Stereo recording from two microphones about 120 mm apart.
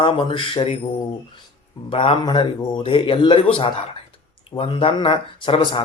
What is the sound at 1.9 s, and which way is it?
A man's voice, 50° left (ahead or behind).